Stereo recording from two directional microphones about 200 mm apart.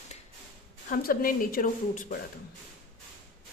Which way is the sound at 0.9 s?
45° left (ahead or behind).